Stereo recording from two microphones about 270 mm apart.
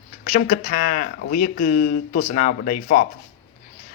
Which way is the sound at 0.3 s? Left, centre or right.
Left.